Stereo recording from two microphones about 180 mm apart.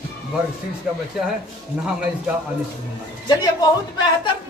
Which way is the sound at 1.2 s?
5° right (ahead or behind).